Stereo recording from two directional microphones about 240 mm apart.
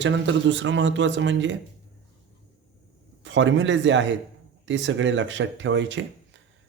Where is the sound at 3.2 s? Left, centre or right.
Right.